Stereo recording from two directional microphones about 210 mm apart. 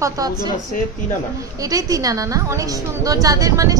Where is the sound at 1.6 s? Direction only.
15° right (ahead or behind).